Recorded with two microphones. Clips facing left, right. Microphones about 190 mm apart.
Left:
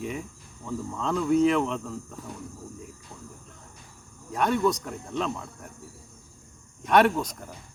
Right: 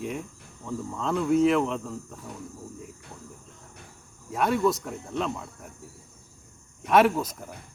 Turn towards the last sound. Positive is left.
turn(degrees=-5)  # may be behind; listen again after turning